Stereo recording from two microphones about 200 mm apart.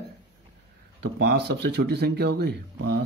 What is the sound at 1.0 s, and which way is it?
Speech, 55° right (ahead or behind).